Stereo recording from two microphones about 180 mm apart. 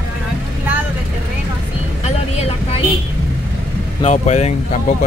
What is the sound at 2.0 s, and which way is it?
Vehicle, 40° left (ahead or behind).